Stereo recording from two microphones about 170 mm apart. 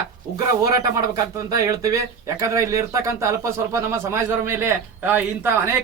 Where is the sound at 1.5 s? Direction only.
20° right (ahead or behind).